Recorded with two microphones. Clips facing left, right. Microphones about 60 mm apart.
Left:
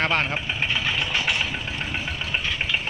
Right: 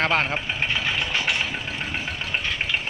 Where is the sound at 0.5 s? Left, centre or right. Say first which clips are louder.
Left 1 dB; right.